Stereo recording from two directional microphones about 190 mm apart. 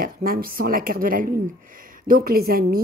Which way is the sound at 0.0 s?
50° right (ahead or behind).